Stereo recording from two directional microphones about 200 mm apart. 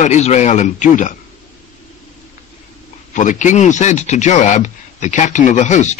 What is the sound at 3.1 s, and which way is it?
Speech, 40° left (ahead or behind).